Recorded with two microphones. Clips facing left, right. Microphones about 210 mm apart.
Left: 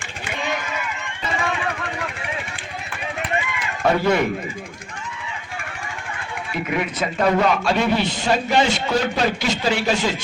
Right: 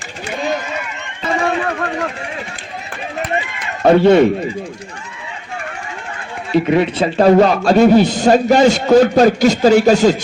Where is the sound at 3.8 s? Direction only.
30° right (ahead or behind).